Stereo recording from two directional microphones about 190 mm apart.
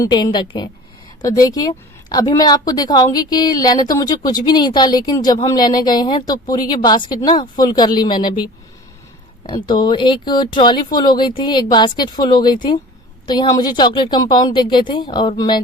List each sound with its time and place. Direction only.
0.0 s a woman's voice: 25° left (ahead or behind)
9.6 s a woman's voice: 20° left (ahead or behind)